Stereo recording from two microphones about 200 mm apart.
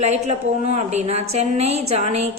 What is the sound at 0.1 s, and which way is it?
A woman's voice, 35° right (ahead or behind).